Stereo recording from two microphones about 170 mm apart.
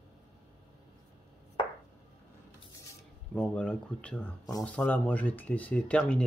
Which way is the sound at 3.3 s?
10° left (ahead or behind).